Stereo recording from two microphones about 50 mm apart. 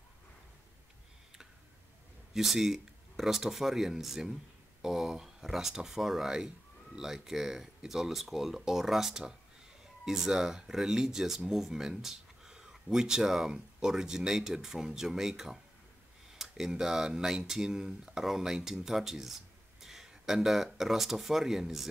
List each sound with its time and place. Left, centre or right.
2.3 s speech: centre